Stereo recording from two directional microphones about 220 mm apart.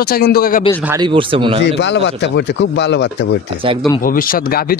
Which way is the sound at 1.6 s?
55° left (ahead or behind).